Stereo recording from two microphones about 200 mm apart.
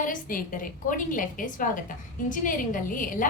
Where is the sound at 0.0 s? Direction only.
40° left (ahead or behind).